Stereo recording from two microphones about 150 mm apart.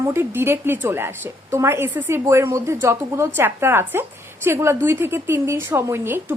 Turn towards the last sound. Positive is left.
turn(degrees=-15)  # may be behind; listen again after turning